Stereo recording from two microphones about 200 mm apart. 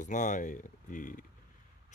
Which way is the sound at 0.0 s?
40° left (ahead or behind).